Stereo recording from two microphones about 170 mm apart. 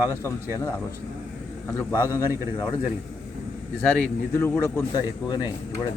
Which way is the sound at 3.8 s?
10° left (ahead or behind).